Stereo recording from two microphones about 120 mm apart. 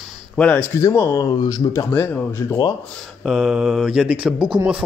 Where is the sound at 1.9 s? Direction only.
15° left (ahead or behind).